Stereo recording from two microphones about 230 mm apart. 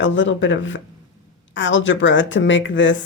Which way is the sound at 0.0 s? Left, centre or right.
Left.